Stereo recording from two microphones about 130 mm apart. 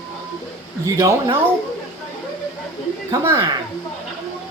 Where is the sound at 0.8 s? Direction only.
25° right (ahead or behind).